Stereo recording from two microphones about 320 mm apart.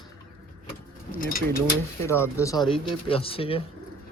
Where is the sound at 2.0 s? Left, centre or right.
Centre.